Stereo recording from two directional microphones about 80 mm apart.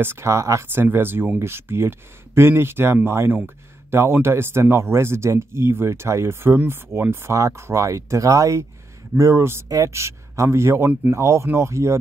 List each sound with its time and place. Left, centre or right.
0.0 s speech: right
0.8 s speech: right